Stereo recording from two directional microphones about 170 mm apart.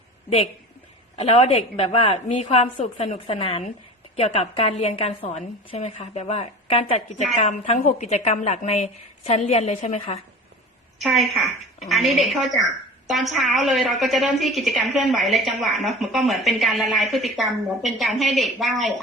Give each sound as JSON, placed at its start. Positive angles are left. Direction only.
{"t": 1.1, "sound": "a woman's voice", "side_deg": 35}
{"t": 11.0, "sound": "a woman's voice", "side_deg": 0}